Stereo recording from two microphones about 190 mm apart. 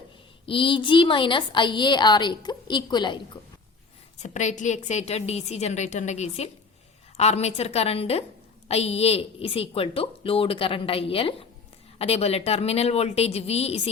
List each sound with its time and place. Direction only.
0.4 s a woman's voice: 25° left (ahead or behind)
4.2 s a woman's voice: 40° left (ahead or behind)